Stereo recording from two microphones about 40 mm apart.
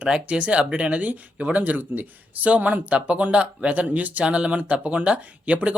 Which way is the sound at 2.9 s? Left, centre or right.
Right.